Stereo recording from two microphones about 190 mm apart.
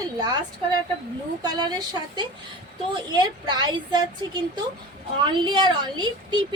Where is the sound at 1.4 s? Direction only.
20° right (ahead or behind).